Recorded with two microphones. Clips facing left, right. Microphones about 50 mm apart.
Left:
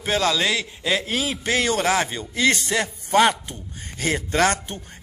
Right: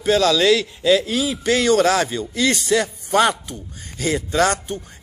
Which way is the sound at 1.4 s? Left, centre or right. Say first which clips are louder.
Right 6 dB; left.